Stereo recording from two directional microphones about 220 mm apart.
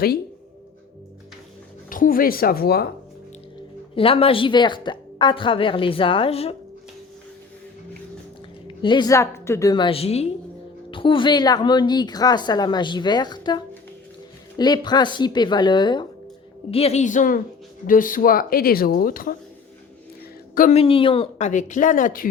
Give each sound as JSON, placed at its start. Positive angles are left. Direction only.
{"t": 1.9, "sound": "speech", "side_deg": 40}
{"t": 3.9, "sound": "a woman's voice", "side_deg": 25}
{"t": 8.6, "sound": "a woman's voice", "side_deg": 20}
{"t": 20.6, "sound": "speech", "side_deg": 30}